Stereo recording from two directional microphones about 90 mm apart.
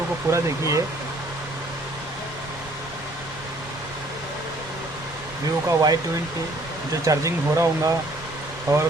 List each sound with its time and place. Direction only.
0.3 s speech: 35° right (ahead or behind)
5.6 s speech: 45° right (ahead or behind)
7.0 s speech: 35° right (ahead or behind)